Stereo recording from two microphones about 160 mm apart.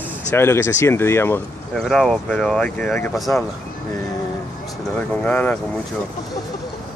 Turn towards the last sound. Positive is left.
turn(degrees=10)  # may be behind; listen again after turning